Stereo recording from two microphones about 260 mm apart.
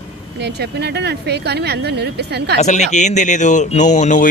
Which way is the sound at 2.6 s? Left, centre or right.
Left.